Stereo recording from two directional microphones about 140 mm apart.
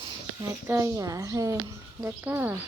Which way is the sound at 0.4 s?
20° right (ahead or behind).